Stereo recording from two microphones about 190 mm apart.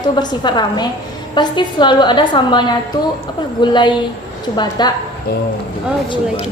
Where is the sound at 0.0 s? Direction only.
20° left (ahead or behind).